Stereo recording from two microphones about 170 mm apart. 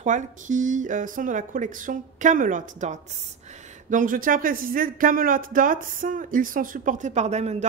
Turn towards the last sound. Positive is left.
turn(degrees=-40)  # may be behind; listen again after turning